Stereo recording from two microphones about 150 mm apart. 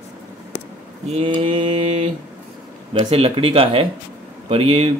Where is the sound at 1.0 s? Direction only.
40° right (ahead or behind).